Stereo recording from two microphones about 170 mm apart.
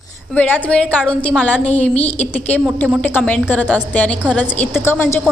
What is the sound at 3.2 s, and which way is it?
A woman's voice, centre (ahead or behind).